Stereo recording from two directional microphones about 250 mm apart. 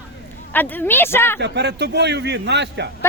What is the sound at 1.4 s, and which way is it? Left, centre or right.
A man's voice, right.